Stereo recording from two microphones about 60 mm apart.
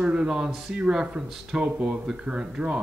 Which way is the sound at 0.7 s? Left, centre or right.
Centre.